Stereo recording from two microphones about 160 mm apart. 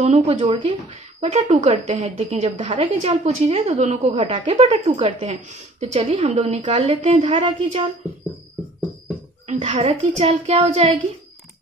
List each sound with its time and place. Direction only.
0.0 s speech: 40° right (ahead or behind)
4.1 s speech: 30° right (ahead or behind)
9.5 s speech: 40° right (ahead or behind)